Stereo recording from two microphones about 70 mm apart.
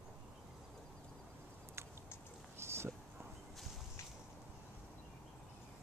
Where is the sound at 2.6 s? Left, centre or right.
Right.